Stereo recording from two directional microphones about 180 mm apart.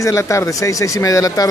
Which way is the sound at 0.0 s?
15° left (ahead or behind).